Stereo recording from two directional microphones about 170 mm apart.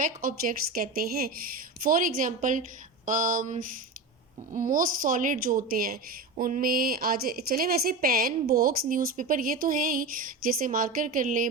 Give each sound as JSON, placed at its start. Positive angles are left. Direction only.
{"t": 0.0, "sound": "a woman's voice", "side_deg": -50}